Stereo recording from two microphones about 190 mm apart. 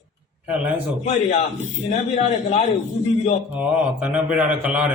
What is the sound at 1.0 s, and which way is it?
A man's voice, 40° left (ahead or behind).